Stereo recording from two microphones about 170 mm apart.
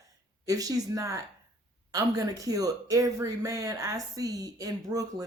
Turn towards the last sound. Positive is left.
turn(degrees=-20)  # may be behind; listen again after turning